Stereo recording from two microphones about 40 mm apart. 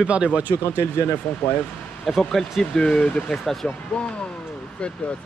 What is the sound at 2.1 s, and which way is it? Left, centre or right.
Speech, centre.